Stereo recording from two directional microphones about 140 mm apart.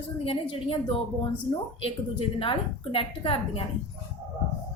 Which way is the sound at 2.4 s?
40° left (ahead or behind).